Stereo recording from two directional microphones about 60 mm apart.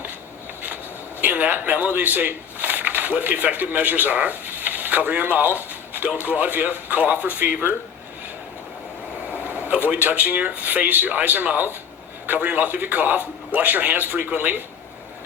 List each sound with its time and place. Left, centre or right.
1.2 s speech: right
9.3 s speech: right